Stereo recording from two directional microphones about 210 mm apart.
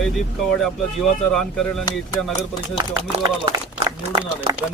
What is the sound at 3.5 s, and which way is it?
Speech, 15° right (ahead or behind).